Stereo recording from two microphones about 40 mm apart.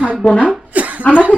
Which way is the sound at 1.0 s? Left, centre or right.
Left.